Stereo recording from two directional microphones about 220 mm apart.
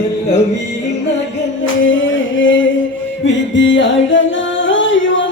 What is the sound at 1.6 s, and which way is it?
Music, 60° left (ahead or behind).